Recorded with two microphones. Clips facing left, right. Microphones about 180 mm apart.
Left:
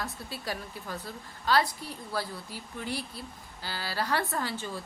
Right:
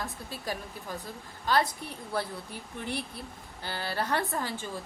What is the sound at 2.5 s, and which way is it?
Speech, 60° right (ahead or behind).